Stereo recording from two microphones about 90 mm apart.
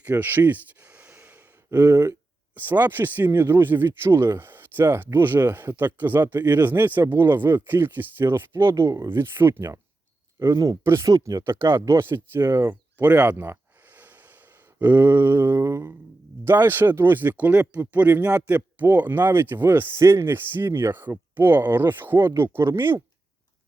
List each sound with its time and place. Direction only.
0.0 s gasp: 20° right (ahead or behind)
2.6 s speech: 20° right (ahead or behind)
9.0 s speech: 25° right (ahead or behind)
10.5 s speech: 40° right (ahead or behind)